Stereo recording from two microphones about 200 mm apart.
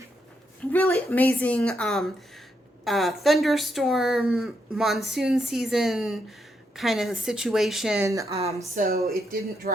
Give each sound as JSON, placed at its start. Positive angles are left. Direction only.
{"t": 0.7, "sound": "speech", "side_deg": 10}
{"t": 8.0, "sound": "speech", "side_deg": -15}
{"t": 8.3, "sound": "speech", "side_deg": -30}
{"t": 8.7, "sound": "speech", "side_deg": -40}